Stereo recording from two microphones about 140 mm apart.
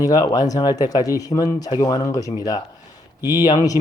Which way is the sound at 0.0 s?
25° left (ahead or behind).